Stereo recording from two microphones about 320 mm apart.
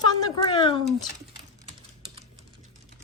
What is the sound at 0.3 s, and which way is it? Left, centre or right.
Speech, centre.